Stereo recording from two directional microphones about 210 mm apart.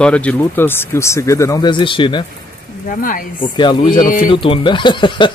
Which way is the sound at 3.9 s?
40° left (ahead or behind).